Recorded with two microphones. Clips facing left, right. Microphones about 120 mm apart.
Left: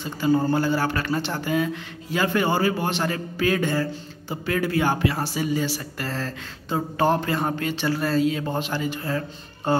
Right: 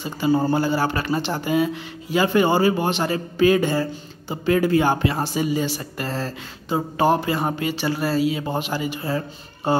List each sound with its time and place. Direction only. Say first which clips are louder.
0.0 s speech: right 1 dB; 15° right (ahead or behind)